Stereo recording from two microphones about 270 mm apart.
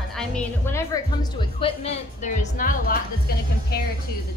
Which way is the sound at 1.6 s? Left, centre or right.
Left.